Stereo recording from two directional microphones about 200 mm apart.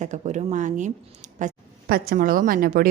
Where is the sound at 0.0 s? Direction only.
35° right (ahead or behind).